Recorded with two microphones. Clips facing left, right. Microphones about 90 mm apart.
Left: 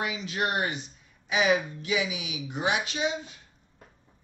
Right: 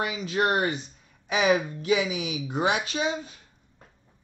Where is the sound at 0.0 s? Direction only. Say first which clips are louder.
Right 4 dB; 40° right (ahead or behind).